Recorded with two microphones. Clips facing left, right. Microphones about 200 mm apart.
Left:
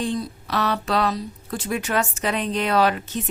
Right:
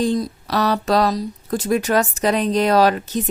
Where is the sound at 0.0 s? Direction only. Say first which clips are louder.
Right 6 dB; 40° right (ahead or behind).